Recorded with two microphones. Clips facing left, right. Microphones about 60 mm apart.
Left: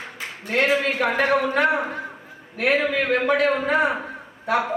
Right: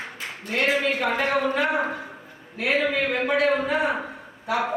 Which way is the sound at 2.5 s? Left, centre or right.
Left.